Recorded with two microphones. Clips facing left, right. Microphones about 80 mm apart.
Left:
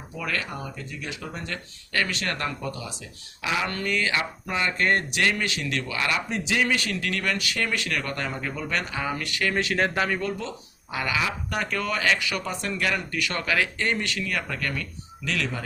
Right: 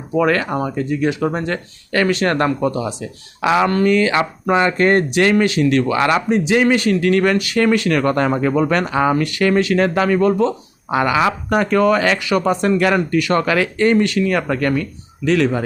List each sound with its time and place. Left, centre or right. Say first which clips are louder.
0.1 s speech: right 15 dB; right
3.4 s speech: right 12 dB; right
3.7 s speech: right 12 dB; right
9.6 s speech: right 6 dB; right
10.2 s speech: right 15 dB; right